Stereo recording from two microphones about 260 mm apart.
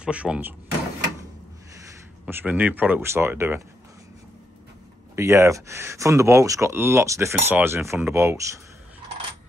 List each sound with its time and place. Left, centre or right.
0.0 s speech: centre
2.2 s speech: centre
5.1 s speech: centre